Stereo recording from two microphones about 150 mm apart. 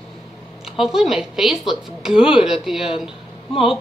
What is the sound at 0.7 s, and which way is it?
Speech, 5° right (ahead or behind).